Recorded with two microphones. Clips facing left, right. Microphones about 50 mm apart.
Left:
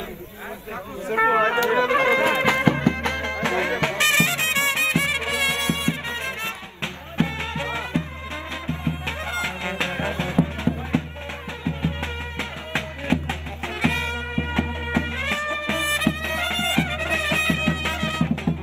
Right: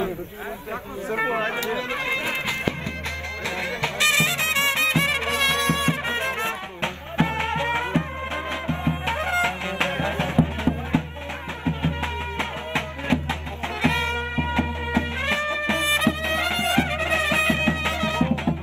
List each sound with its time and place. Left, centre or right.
1.1 s music: left
4.6 s music: right
6.0 s music: right